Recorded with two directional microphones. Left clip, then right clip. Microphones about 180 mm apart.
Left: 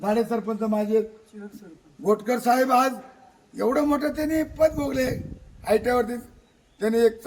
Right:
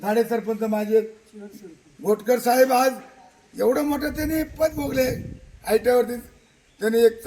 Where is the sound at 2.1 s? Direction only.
25° left (ahead or behind).